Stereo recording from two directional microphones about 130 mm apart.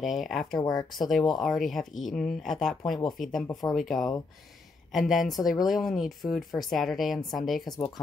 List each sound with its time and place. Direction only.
0.0 s speech: centre (ahead or behind)
0.6 s speech: 35° left (ahead or behind)
0.9 s speech: centre (ahead or behind)